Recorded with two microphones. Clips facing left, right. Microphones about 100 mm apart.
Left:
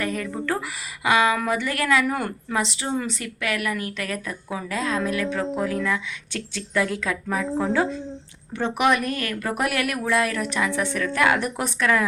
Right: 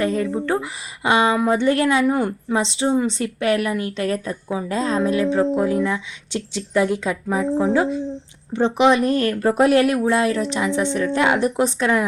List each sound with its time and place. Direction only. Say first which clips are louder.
0.0 s a woman's voice: right 6 dB; 25° right (ahead or behind)